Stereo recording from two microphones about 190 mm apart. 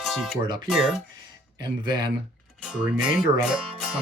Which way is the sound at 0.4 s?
25° right (ahead or behind).